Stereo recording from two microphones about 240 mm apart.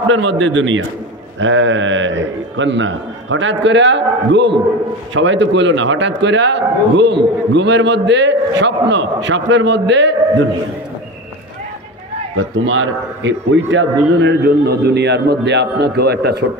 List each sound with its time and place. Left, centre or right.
0.1 s a man's voice: right
12.4 s a man's voice: right